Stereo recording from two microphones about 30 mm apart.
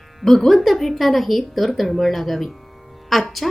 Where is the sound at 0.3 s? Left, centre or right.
Centre.